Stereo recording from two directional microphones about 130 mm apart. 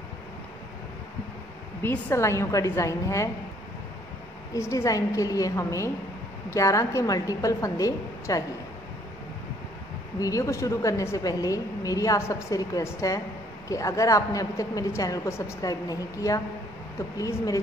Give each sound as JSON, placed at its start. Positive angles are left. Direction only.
{"t": 1.8, "sound": "a woman's voice", "side_deg": 15}
{"t": 4.6, "sound": "a woman's voice", "side_deg": 25}
{"t": 10.2, "sound": "a woman's voice", "side_deg": 25}